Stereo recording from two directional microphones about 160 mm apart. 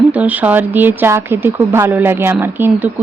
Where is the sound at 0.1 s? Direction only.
10° right (ahead or behind).